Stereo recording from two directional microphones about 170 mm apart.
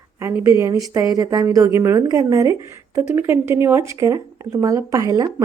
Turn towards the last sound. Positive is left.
turn(degrees=-20)  # may be behind; listen again after turning